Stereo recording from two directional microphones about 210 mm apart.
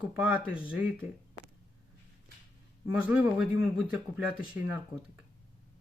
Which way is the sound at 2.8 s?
5° right (ahead or behind).